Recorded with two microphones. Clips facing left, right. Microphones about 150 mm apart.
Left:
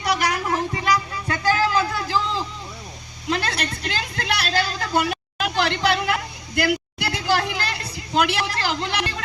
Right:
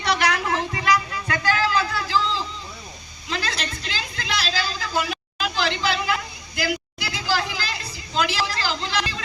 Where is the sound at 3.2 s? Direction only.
55° left (ahead or behind).